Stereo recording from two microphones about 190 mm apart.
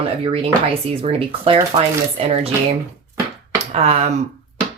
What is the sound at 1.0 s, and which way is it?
Speech, 30° right (ahead or behind).